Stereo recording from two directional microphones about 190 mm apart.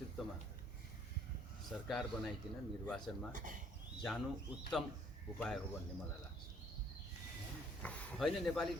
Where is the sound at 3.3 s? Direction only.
45° right (ahead or behind).